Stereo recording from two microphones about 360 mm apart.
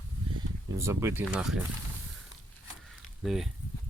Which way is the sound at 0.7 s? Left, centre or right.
Centre.